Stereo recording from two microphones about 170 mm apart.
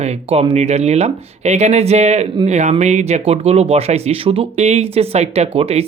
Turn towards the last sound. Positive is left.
turn(degrees=-35)  # may be behind; listen again after turning